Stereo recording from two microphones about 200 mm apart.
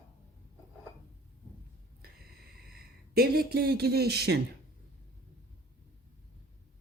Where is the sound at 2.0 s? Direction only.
50° right (ahead or behind).